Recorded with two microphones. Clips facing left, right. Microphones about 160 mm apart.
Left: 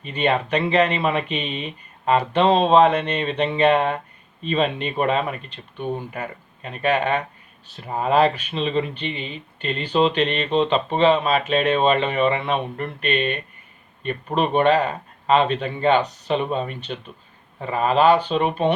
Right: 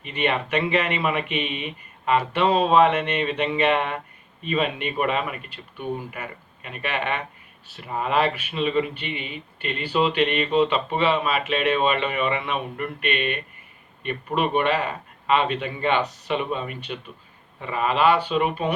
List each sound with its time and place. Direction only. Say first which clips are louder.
0.0 s speech: left 3 dB; 35° left (ahead or behind)